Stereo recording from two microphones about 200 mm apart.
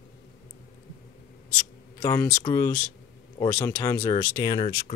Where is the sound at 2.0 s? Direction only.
15° left (ahead or behind).